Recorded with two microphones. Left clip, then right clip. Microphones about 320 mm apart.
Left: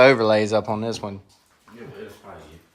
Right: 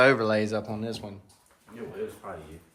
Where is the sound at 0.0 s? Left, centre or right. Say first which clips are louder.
Left 7 dB; centre.